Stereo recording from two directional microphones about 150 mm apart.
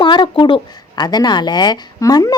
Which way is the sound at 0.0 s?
30° left (ahead or behind).